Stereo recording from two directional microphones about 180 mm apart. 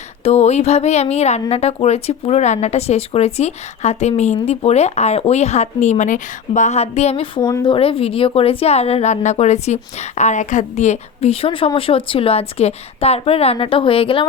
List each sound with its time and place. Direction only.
0.3 s a woman's voice: 35° left (ahead or behind)